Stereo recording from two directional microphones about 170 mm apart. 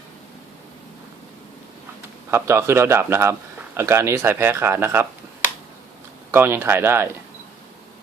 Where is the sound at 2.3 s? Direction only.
15° right (ahead or behind).